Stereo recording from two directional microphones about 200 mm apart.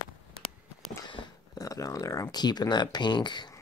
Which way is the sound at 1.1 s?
20° left (ahead or behind).